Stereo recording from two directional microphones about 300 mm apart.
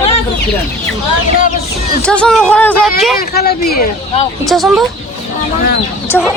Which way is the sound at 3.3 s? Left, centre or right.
Left.